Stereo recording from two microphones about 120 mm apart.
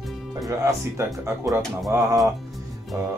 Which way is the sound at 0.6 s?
20° right (ahead or behind).